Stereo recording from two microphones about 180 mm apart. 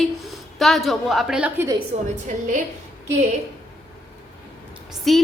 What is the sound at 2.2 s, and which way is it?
Speech, 45° right (ahead or behind).